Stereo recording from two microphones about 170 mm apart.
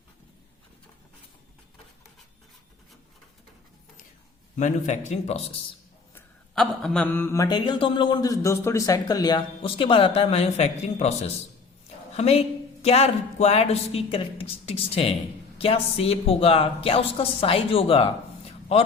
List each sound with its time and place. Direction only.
4.5 s a man's voice: 45° left (ahead or behind)
6.1 s speech: 5° left (ahead or behind); by 18.1 s 35° left (ahead or behind)